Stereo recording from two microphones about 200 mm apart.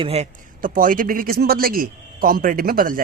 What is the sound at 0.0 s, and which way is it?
A man's voice, 30° right (ahead or behind).